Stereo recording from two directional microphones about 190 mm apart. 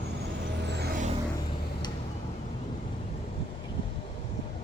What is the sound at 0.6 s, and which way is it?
Vehicle, 60° right (ahead or behind).